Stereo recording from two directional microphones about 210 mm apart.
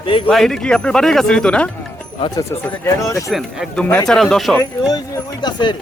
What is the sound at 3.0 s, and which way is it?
Speech, 15° left (ahead or behind).